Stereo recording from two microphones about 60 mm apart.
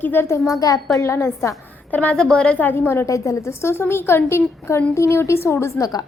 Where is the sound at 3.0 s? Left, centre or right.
Left.